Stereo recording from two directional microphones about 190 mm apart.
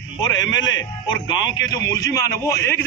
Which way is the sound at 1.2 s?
20° left (ahead or behind).